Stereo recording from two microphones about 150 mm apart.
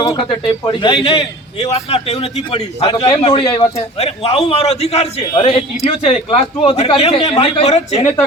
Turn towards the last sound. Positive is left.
turn(degrees=45)  # may be behind; listen again after turning